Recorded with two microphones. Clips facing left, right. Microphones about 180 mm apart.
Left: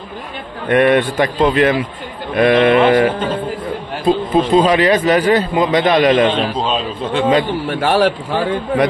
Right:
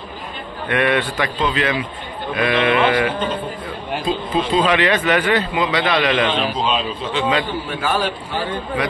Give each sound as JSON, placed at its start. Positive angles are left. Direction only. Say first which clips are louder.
{"t": 0.7, "sound": "a man's voice", "louder": "left 7 dB", "side_deg": 45}
{"t": 6.7, "sound": "a man's voice", "louder": "left 3 dB", "side_deg": 50}
{"t": 7.6, "sound": "a man's voice", "louder": "left 7 dB", "side_deg": 65}